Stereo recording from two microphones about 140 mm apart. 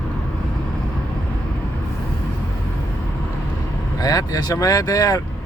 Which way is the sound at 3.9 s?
25° left (ahead or behind).